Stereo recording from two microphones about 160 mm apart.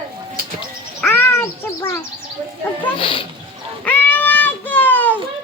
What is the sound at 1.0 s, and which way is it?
Speech, 15° left (ahead or behind).